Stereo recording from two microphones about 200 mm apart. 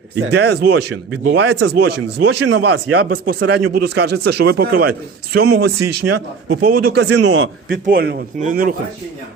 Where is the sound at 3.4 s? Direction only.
55° right (ahead or behind).